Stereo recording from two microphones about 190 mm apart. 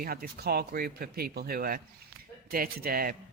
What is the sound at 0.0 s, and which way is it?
A man's voice, 50° right (ahead or behind).